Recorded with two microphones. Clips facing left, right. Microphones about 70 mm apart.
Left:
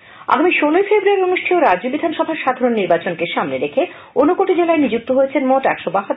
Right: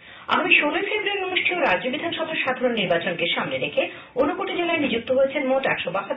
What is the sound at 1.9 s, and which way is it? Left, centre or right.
Speech, left.